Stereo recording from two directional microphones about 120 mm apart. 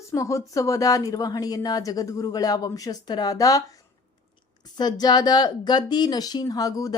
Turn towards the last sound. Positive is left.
turn(degrees=30)  # may be behind; listen again after turning